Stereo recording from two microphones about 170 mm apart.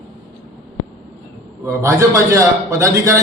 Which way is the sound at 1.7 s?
15° right (ahead or behind).